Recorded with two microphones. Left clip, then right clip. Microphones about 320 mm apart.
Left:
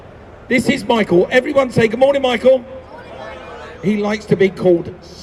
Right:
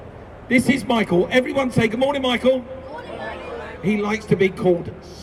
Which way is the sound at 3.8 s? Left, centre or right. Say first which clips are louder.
Left 4 dB; left.